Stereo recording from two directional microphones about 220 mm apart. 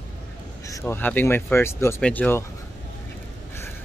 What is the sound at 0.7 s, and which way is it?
Speech, 15° left (ahead or behind).